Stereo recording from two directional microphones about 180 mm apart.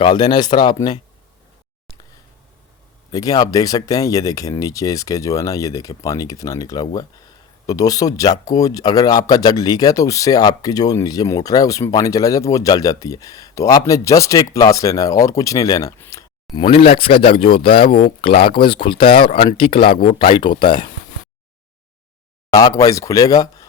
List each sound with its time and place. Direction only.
0.0 s speech: 25° left (ahead or behind)
3.1 s speech: 20° left (ahead or behind)
16.7 s speech: 30° left (ahead or behind)
22.4 s speech: 20° left (ahead or behind)